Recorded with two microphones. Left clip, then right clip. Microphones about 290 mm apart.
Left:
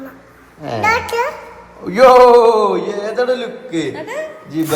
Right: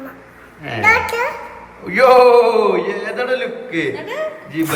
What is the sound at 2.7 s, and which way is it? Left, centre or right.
A man's voice, centre.